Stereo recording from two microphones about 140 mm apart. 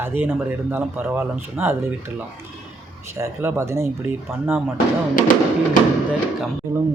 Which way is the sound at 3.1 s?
20° right (ahead or behind).